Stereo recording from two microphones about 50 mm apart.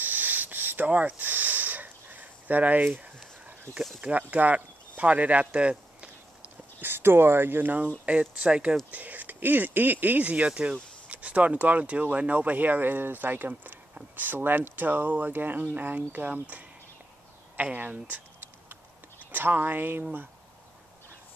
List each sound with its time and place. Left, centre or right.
0.0 s a sound: right
4.0 s speech: right
6.8 s speech: right
8.0 s speech: right
8.9 s speech: right
19.3 s speech: right